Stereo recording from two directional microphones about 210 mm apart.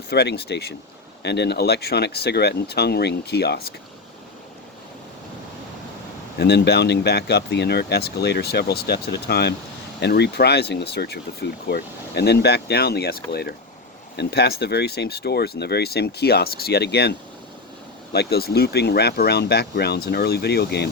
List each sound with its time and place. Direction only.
0.1 s speech: 50° left (ahead or behind)
6.4 s speech: 50° left (ahead or behind)